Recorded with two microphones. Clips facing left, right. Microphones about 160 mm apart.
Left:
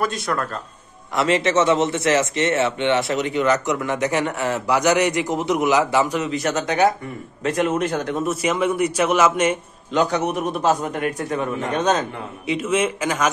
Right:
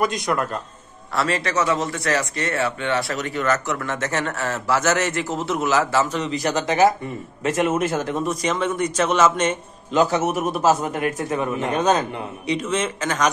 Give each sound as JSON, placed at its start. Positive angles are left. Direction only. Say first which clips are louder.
{"t": 0.0, "sound": "speech", "louder": "right 1 dB", "side_deg": -15}
{"t": 1.1, "sound": "a man's voice", "louder": "left 4 dB", "side_deg": 20}
{"t": 9.9, "sound": "a man's voice", "louder": "right 1 dB", "side_deg": -5}
{"t": 12.5, "sound": "a man's voice", "louder": "left 5 dB", "side_deg": 10}